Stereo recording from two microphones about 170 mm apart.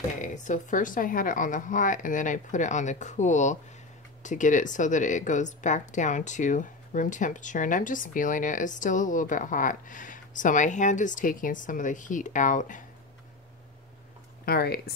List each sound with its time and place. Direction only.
0.2 s speech: 45° left (ahead or behind)
14.4 s speech: 65° left (ahead or behind)